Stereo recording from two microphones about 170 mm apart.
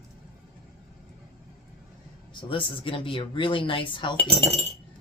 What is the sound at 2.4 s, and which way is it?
Speech, 30° left (ahead or behind).